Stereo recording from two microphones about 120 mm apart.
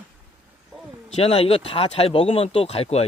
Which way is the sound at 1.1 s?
55° left (ahead or behind).